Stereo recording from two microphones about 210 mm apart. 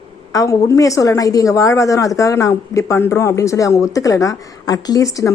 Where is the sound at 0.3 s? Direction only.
15° left (ahead or behind).